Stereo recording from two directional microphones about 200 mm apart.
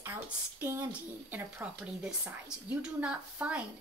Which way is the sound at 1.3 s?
10° right (ahead or behind).